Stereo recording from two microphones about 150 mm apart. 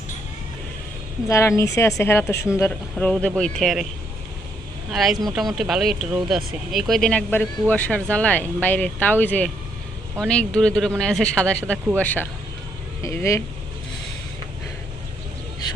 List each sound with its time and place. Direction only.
1.3 s speech: 20° left (ahead or behind); by 3.8 s centre (ahead or behind)
4.9 s speech: centre (ahead or behind); by 13.4 s 20° left (ahead or behind)